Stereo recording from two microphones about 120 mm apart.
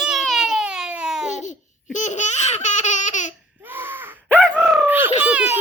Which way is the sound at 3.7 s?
15° right (ahead or behind).